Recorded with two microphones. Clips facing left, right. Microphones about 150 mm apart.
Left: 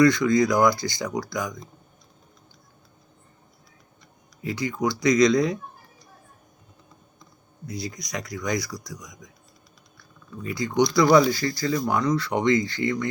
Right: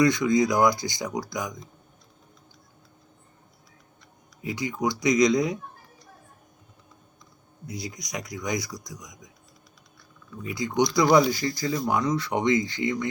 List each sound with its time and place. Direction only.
0.0 s speech: 15° right (ahead or behind)
4.4 s speech: 15° right (ahead or behind)
7.7 s speech: 15° right (ahead or behind)
10.4 s speech: 15° right (ahead or behind)